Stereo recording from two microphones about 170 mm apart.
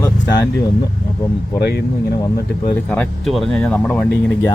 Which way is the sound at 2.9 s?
5° left (ahead or behind).